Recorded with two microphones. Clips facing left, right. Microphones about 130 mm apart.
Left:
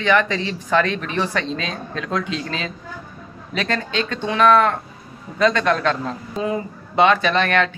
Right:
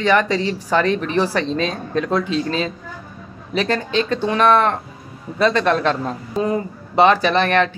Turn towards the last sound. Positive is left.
turn(degrees=-30)  # may be behind; listen again after turning